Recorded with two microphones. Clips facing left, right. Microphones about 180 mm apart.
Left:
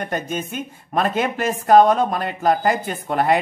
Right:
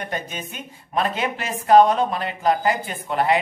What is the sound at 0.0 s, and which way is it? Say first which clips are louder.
A man's voice: left 5 dB; 45° left (ahead or behind).